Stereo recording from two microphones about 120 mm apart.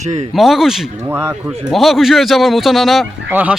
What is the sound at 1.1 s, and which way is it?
Speech, 20° right (ahead or behind).